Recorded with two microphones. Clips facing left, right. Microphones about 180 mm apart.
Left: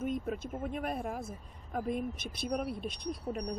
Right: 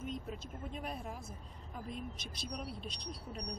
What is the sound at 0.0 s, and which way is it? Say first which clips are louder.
Speech: left 8 dB; 55° left (ahead or behind).